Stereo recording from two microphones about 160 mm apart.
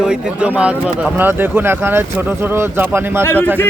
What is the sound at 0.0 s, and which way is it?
Speech, 5° right (ahead or behind).